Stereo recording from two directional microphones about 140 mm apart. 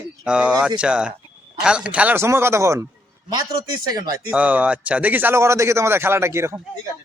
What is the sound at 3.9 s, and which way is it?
Speech, 25° right (ahead or behind).